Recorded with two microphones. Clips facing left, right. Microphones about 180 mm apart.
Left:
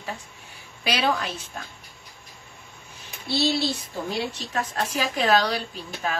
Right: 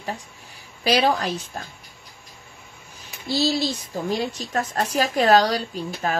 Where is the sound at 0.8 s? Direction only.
35° right (ahead or behind).